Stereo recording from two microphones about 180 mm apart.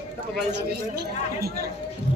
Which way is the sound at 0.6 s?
60° right (ahead or behind).